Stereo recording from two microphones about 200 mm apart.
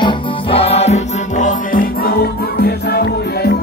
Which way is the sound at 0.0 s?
25° left (ahead or behind).